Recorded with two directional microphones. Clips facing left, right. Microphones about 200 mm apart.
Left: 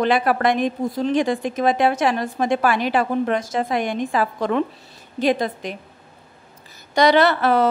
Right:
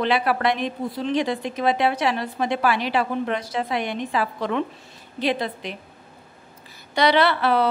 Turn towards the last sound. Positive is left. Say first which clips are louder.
# left 3 dB
turn(degrees=45)  # may be behind; listen again after turning